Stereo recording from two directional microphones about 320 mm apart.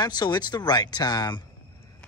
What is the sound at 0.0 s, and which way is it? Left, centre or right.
Speech, centre.